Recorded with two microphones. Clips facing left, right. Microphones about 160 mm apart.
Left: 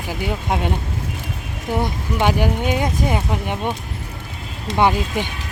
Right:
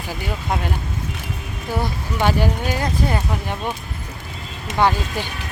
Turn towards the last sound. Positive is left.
turn(degrees=20)  # may be behind; listen again after turning